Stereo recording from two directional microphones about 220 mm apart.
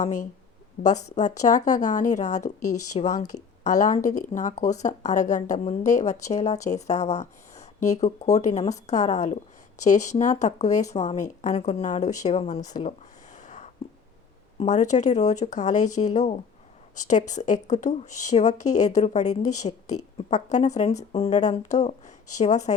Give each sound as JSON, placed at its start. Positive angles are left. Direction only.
{"t": 0.8, "sound": "speech", "side_deg": 50}
{"t": 1.4, "sound": "speech", "side_deg": 35}
{"t": 2.6, "sound": "speech", "side_deg": 90}
{"t": 2.9, "sound": "speech", "side_deg": 35}
{"t": 12.6, "sound": "speech", "side_deg": 15}
{"t": 13.3, "sound": "a sound", "side_deg": 35}
{"t": 14.6, "sound": "speech", "side_deg": 35}